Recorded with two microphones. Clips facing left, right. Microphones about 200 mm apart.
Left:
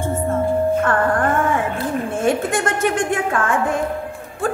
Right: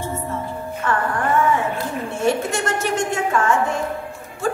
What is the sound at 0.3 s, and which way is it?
Music, 50° left (ahead or behind).